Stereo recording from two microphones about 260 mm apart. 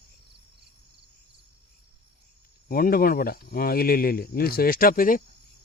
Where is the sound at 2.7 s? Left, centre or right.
Left.